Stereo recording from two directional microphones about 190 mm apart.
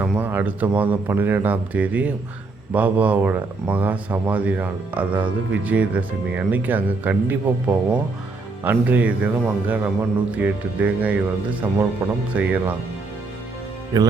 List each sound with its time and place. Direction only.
0.0 s speech: 10° right (ahead or behind)
13.9 s speech: 20° right (ahead or behind)